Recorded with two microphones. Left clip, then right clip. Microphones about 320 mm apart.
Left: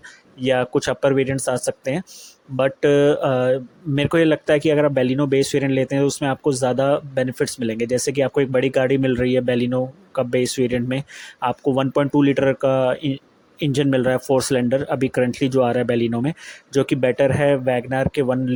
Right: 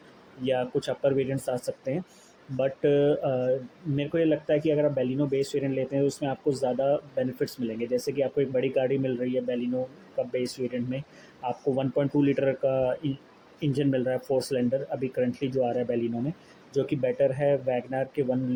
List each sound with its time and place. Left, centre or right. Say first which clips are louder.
0.4 s speech: left 8 dB; left